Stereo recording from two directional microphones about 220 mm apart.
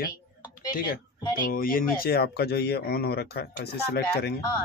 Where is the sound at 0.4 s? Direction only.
20° left (ahead or behind).